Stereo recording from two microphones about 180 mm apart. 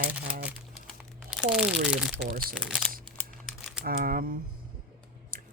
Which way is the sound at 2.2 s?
55° right (ahead or behind).